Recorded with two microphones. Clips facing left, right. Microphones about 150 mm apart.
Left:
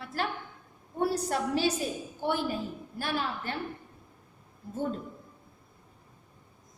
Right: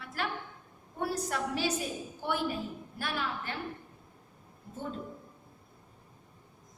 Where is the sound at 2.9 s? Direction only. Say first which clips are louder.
Left 3 dB; 30° left (ahead or behind).